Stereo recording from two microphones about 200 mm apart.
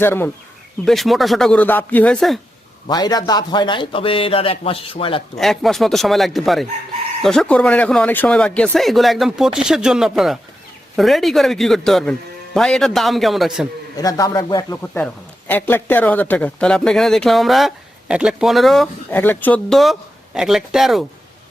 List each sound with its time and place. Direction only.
0.0 s speech: 10° left (ahead or behind)
0.9 s a man's voice: centre (ahead or behind)
2.8 s a man's voice: 20° left (ahead or behind)
5.4 s a man's voice: centre (ahead or behind)
13.9 s a man's voice: 15° left (ahead or behind); by 21.0 s centre (ahead or behind)